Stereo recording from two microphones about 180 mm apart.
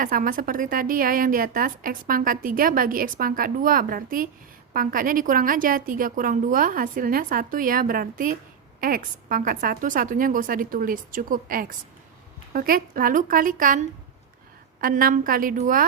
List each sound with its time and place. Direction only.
0.0 s a woman's voice: 50° right (ahead or behind)